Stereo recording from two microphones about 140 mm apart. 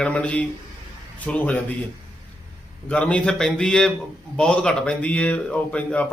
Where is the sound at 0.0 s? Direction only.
10° left (ahead or behind).